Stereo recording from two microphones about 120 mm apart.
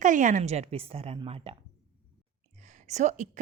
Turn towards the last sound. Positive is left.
turn(degrees=-85)